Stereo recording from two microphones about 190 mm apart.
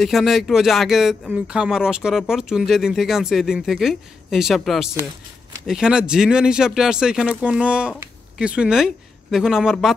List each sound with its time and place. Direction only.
0.0 s speech: centre (ahead or behind)